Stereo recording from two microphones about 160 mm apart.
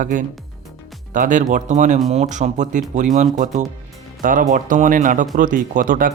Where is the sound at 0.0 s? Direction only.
55° right (ahead or behind).